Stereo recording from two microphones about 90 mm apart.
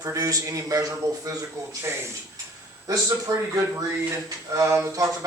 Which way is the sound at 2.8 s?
40° right (ahead or behind).